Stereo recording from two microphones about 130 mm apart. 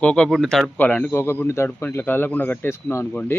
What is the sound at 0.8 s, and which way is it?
Speech, 10° left (ahead or behind).